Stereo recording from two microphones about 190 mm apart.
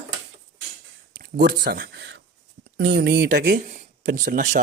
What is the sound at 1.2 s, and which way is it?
Speech, 50° right (ahead or behind).